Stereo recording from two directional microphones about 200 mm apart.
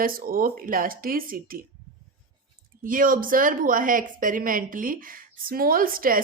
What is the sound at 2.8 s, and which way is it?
Speech, 45° right (ahead or behind).